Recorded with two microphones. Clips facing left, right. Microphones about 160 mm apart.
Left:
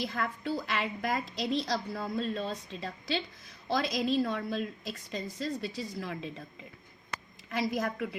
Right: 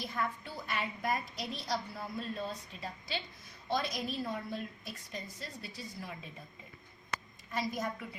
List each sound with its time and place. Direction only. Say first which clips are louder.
0.0 s a woman's voice: left 4 dB; 90° left
7.5 s a woman's voice: left 5 dB; 75° left (ahead or behind)